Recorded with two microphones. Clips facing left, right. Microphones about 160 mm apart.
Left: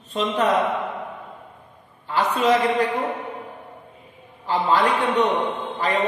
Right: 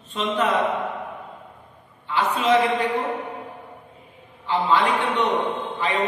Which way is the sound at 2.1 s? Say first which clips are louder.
Left 1 dB; 40° left (ahead or behind).